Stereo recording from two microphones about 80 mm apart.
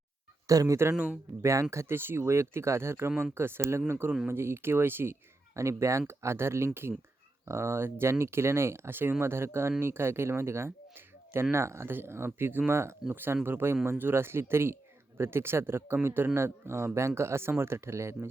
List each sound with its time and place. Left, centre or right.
0.4 s speech: right
0.9 s speech: centre
1.4 s speech: right